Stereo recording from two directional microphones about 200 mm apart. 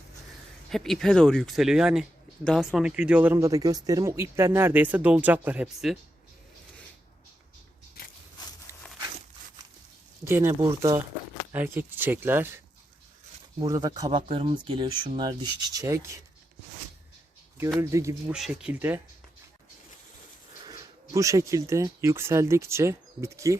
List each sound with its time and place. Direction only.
0.7 s speech: centre (ahead or behind)
8.7 s a sound: 15° right (ahead or behind)
10.2 s speech: 15° right (ahead or behind)
17.7 s speech: 15° right (ahead or behind)
18.3 s speech: 5° right (ahead or behind)
20.7 s speech: 15° right (ahead or behind)